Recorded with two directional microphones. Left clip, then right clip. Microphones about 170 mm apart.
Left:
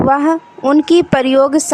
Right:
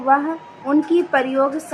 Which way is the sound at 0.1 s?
65° left (ahead or behind).